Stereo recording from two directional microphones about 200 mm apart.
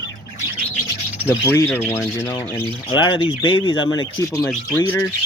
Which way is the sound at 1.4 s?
10° left (ahead or behind).